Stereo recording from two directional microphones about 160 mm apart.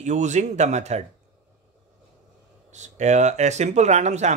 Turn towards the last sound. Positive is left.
turn(degrees=-45)  # may be behind; listen again after turning